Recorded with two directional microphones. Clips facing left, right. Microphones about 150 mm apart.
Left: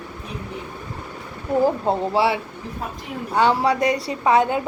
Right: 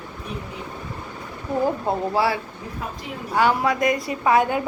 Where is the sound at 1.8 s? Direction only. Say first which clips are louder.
Left 2 dB; 20° left (ahead or behind).